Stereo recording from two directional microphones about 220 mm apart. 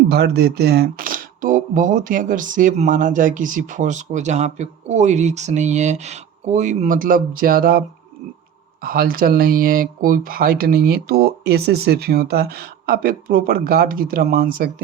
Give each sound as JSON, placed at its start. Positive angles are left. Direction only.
{"t": 0.1, "sound": "speech", "side_deg": -45}